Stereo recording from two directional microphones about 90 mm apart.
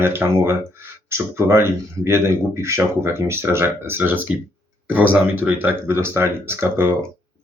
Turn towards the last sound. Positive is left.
turn(degrees=-25)  # may be behind; listen again after turning